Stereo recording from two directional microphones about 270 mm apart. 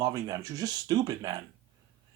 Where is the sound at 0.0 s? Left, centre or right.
Centre.